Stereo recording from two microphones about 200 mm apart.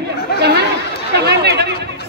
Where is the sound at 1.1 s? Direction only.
55° right (ahead or behind).